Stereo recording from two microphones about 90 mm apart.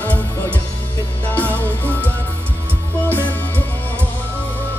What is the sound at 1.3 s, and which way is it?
Music, 20° left (ahead or behind).